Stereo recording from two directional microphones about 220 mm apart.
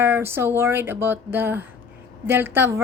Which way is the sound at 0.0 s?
10° right (ahead or behind).